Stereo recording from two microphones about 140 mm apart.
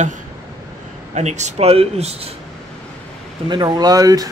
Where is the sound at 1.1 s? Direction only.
55° right (ahead or behind).